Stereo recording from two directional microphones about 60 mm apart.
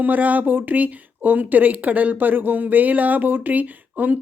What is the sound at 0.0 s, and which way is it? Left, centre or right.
Speech, right.